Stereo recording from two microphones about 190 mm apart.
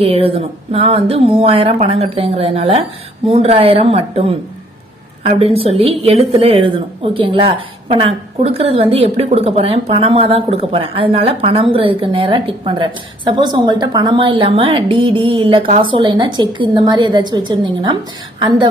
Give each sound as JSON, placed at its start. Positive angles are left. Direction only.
{"t": 0.0, "sound": "a woman's voice", "side_deg": -30}
{"t": 5.4, "sound": "a woman's voice", "side_deg": -30}